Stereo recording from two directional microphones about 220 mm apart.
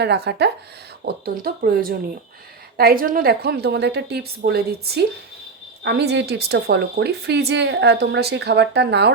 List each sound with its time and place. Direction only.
0.0 s speech: 50° right (ahead or behind)